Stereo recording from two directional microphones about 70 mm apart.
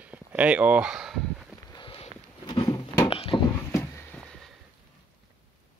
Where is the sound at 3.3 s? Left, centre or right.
Left.